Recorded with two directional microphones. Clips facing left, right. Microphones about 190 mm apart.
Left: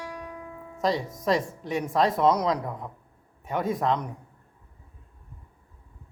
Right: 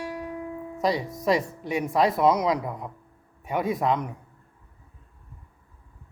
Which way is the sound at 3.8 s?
10° right (ahead or behind).